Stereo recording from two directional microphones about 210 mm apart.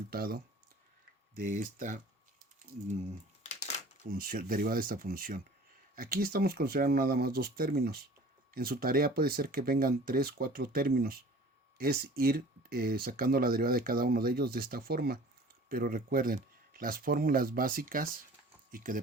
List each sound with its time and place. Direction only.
0.1 s speech: 45° right (ahead or behind)
1.4 s speech: 40° right (ahead or behind)
3.5 s a sound: 35° left (ahead or behind)
4.0 s speech: 45° right (ahead or behind)